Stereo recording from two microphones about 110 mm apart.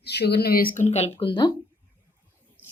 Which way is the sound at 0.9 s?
70° left (ahead or behind).